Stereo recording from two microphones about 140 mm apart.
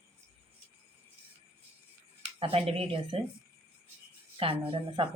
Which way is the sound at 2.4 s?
45° right (ahead or behind).